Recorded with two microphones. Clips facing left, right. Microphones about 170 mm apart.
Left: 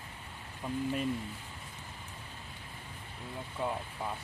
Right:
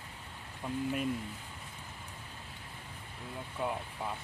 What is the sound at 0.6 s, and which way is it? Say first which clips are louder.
Speech: left 1 dB; centre (ahead or behind).